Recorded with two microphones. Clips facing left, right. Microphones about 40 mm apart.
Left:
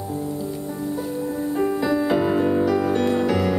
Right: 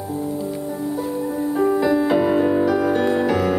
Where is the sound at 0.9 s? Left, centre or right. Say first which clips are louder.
Right 2 dB; centre.